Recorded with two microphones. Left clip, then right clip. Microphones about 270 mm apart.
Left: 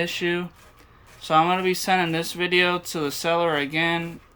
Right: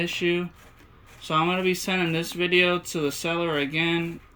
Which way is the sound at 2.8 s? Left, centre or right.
Left.